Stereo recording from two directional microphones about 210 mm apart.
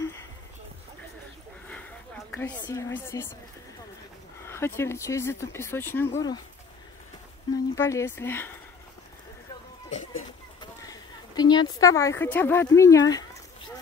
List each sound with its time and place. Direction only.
2.3 s a woman's voice: 5° left (ahead or behind)
4.5 s speech: 10° left (ahead or behind)
7.5 s speech: 15° left (ahead or behind)
10.6 s a sound: 20° left (ahead or behind)
11.8 s speech: 15° left (ahead or behind)